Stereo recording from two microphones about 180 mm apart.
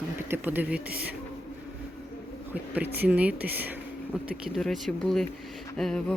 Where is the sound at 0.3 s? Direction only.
10° right (ahead or behind).